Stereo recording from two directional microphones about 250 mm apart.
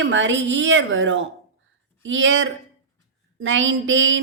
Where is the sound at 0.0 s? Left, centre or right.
Right.